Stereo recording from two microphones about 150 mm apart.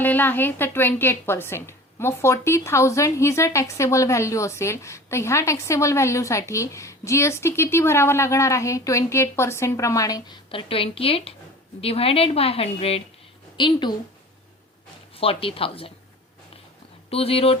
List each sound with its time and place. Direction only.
0.0 s speech: 15° left (ahead or behind)
10.5 s a woman's voice: 40° left (ahead or behind)
15.1 s a woman's voice: 40° left (ahead or behind)
17.1 s a woman's voice: 40° left (ahead or behind)